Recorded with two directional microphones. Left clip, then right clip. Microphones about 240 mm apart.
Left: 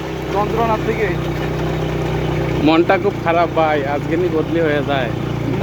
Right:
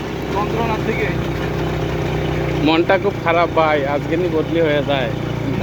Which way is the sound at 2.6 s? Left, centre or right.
Centre.